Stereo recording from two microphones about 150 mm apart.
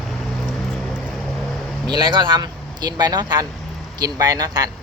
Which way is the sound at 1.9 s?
30° right (ahead or behind).